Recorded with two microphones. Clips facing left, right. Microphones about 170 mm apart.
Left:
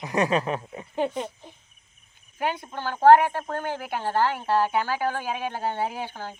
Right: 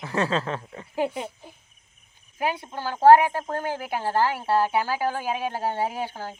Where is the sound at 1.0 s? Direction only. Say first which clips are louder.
Even; 10° right (ahead or behind).